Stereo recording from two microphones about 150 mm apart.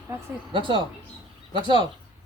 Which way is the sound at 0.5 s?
35° right (ahead or behind).